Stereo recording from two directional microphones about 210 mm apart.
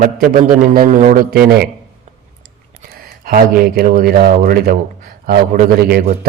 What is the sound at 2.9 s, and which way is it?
Speech, 45° right (ahead or behind).